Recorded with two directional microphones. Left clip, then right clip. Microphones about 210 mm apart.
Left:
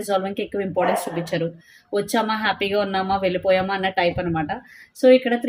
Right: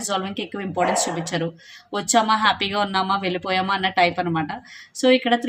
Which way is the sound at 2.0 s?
20° right (ahead or behind).